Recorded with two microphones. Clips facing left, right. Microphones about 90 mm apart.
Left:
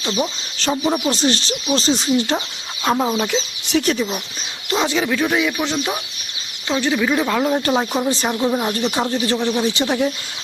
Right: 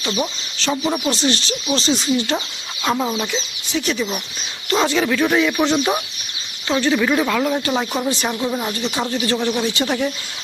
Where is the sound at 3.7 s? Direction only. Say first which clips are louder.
Left 5 dB; 70° left (ahead or behind).